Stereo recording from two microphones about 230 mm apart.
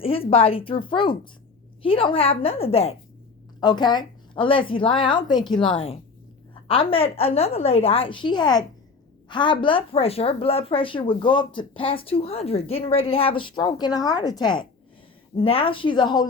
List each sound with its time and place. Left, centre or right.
0.0 s speech: left